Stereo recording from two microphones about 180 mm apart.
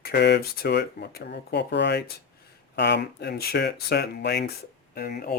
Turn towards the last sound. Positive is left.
turn(degrees=60)  # may be behind; listen again after turning